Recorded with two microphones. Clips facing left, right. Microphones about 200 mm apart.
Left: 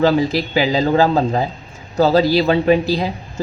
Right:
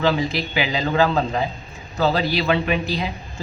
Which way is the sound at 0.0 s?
40° left (ahead or behind).